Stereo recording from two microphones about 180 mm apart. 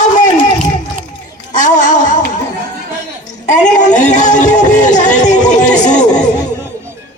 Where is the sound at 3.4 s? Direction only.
40° left (ahead or behind).